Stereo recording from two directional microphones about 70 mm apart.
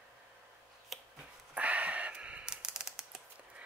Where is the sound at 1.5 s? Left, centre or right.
Centre.